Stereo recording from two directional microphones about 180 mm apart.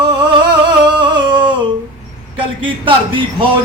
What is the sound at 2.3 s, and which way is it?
A man's voice, 30° right (ahead or behind).